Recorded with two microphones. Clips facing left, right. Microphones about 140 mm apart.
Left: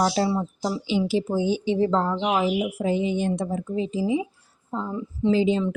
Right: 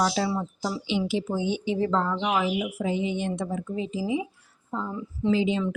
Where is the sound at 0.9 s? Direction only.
40° left (ahead or behind).